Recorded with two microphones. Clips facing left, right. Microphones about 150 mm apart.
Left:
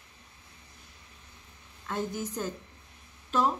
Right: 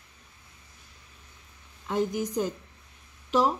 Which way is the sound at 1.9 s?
15° right (ahead or behind).